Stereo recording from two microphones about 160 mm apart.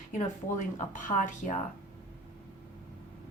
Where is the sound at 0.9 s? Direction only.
55° left (ahead or behind).